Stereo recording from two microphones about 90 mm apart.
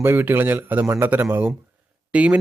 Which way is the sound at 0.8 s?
35° right (ahead or behind).